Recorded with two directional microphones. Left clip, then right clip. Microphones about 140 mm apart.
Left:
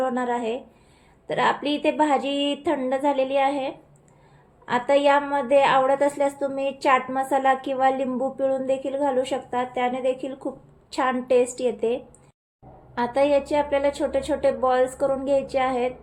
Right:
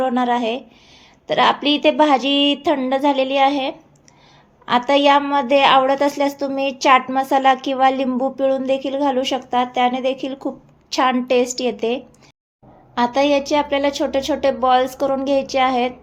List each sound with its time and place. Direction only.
0.0 s a woman's voice: 35° right (ahead or behind)